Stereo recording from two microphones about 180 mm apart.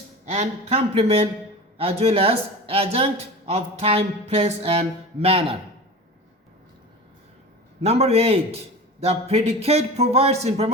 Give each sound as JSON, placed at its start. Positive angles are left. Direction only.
{"t": 0.3, "sound": "speech", "side_deg": -35}
{"t": 7.8, "sound": "speech", "side_deg": -35}